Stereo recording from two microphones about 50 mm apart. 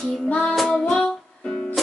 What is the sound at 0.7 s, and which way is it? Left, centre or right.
Music, centre.